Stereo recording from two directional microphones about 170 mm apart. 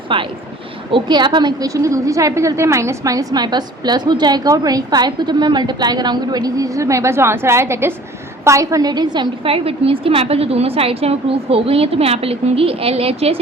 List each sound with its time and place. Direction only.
0.1 s a woman's voice: 30° right (ahead or behind)